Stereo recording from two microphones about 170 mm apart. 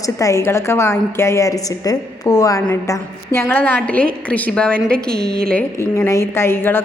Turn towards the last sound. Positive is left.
turn(degrees=10)  # may be behind; listen again after turning